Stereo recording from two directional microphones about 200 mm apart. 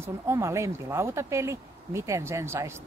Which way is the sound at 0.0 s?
15° right (ahead or behind).